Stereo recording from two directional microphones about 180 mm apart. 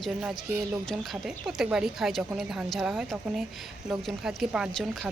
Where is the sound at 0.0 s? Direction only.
5° right (ahead or behind).